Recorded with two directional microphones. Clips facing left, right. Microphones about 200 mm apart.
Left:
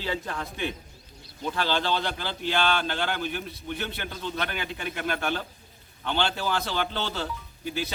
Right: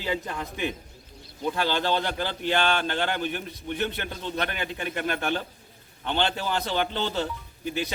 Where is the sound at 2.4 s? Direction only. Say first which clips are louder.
Right 1 dB; 50° right (ahead or behind).